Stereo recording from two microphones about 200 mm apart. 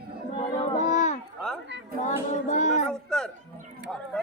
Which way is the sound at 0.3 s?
30° left (ahead or behind).